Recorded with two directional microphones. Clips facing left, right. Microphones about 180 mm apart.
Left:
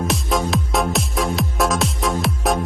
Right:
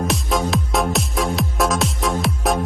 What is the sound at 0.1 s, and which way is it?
Music, centre (ahead or behind).